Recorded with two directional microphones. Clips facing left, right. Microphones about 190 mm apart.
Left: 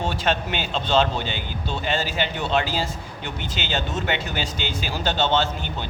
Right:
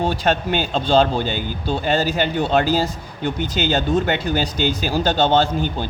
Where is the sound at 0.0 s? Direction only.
40° right (ahead or behind).